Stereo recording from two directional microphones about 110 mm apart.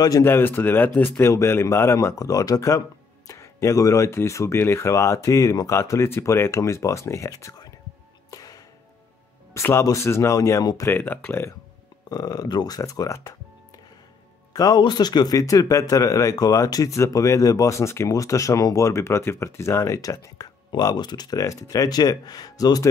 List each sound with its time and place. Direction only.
0.2 s speech: 20° left (ahead or behind)
8.3 s music: 35° left (ahead or behind)
9.5 s speech: 25° left (ahead or behind)
10.9 s speech: 20° left (ahead or behind)
12.1 s speech: 35° left (ahead or behind)
14.5 s speech: 35° left (ahead or behind)